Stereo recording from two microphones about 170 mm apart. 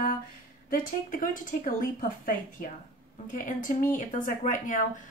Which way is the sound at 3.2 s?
50° left (ahead or behind).